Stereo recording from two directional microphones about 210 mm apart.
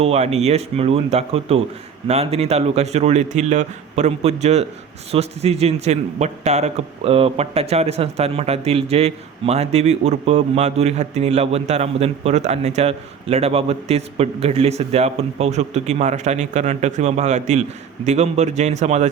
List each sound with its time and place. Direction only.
0.0 s a man's voice: 30° right (ahead or behind)